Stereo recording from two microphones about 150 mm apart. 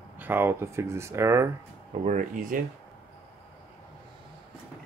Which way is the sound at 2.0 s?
60° right (ahead or behind).